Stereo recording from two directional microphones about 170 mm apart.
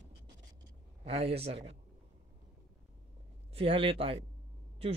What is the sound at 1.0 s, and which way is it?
Speech, 35° right (ahead or behind).